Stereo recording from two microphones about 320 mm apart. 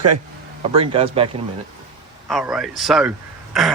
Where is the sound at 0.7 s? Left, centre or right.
Centre.